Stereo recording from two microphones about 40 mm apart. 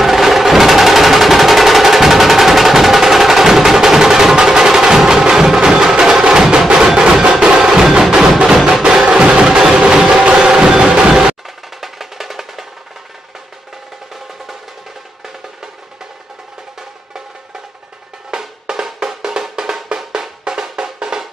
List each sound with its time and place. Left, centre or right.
0.0 s music: centre; by 11.1 s right
11.1 s music: centre
18.3 s drum: centre
18.9 s music: centre